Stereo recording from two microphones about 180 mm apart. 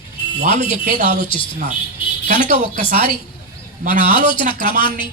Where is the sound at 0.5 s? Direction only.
30° left (ahead or behind).